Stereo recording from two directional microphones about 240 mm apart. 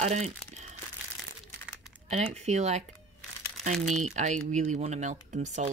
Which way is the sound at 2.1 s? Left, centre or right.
Right.